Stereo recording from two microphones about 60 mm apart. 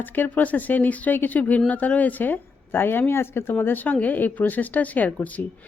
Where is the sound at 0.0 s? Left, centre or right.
Left.